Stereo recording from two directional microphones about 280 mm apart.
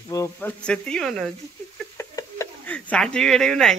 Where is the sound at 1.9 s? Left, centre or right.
Centre.